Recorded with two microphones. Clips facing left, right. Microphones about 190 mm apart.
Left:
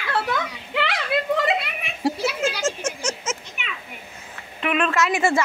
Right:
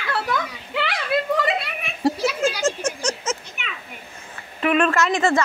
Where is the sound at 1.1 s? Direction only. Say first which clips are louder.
Right 2 dB; 20° left (ahead or behind).